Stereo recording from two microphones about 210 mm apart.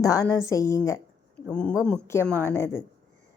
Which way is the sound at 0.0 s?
15° left (ahead or behind).